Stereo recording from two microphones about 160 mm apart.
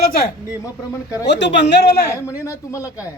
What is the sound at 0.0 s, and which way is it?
Speech, 70° left (ahead or behind).